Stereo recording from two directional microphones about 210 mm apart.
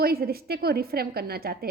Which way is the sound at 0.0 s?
45° right (ahead or behind).